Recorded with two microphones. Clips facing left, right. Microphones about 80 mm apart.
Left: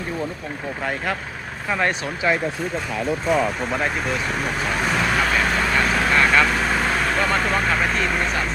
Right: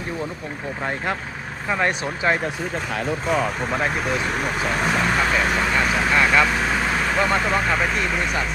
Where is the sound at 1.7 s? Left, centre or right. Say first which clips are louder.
Even; right.